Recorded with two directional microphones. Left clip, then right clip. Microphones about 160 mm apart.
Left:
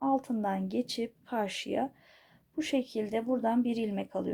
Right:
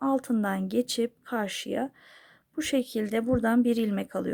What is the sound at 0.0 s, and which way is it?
A woman's voice, 45° right (ahead or behind).